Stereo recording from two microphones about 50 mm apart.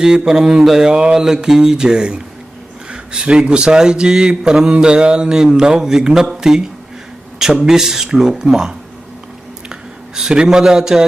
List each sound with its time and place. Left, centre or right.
0.0 s speech: centre
7.6 s speech: centre
10.2 s speech: centre